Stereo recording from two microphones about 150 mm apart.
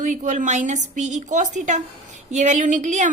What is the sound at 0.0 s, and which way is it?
A woman's voice, 55° right (ahead or behind).